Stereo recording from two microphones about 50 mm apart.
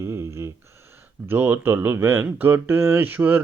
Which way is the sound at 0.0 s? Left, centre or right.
Right.